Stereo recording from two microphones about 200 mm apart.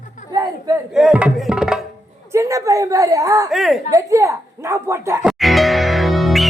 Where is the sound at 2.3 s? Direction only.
15° right (ahead or behind).